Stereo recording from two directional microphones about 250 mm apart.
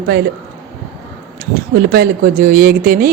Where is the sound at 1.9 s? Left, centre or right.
Right.